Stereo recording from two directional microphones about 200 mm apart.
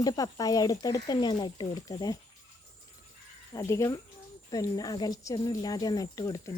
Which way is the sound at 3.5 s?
15° left (ahead or behind).